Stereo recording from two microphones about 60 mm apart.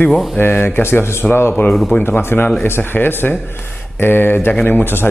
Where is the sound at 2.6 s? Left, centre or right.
Left.